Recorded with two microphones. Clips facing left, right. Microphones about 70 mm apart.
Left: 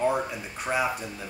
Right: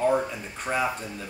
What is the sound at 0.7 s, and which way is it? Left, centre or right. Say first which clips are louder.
Speech: even; centre.